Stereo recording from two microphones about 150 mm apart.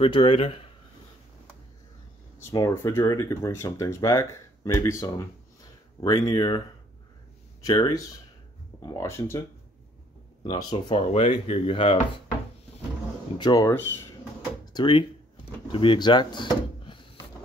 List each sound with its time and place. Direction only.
0.0 s speech: 40° left (ahead or behind)
2.4 s speech: 20° left (ahead or behind)
7.6 s speech: 25° left (ahead or behind)
10.5 s speech: 30° left (ahead or behind)
13.4 s speech: 25° left (ahead or behind)
14.7 s speech: 30° left (ahead or behind)